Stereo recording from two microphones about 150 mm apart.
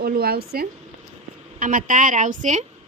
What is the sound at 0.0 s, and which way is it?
Speech, 90° right.